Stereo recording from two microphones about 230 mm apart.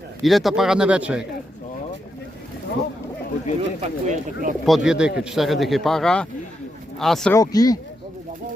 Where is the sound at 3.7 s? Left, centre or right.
Right.